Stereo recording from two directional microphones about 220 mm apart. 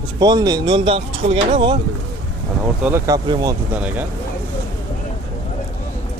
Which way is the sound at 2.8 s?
15° right (ahead or behind).